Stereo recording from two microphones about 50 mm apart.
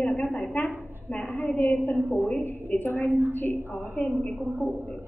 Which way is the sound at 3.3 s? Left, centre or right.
Left.